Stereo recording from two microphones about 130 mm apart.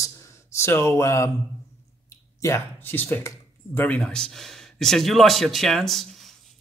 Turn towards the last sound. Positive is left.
turn(degrees=0)  # may be behind; listen again after turning